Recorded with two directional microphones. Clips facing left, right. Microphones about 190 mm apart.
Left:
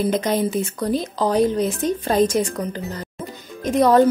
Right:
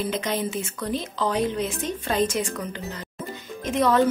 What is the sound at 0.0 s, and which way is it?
A woman's voice, 40° left (ahead or behind).